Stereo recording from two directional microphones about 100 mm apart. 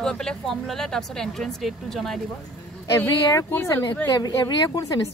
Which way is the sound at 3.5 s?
20° left (ahead or behind).